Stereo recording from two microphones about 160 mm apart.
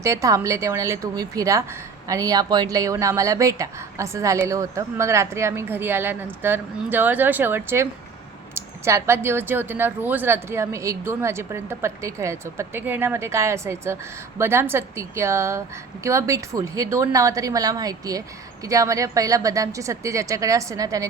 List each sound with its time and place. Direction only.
0.0 s a woman's voice: 20° right (ahead or behind)